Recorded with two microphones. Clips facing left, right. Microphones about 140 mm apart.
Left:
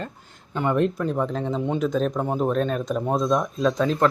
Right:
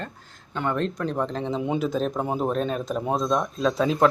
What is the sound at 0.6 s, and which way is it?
Speech, 15° left (ahead or behind).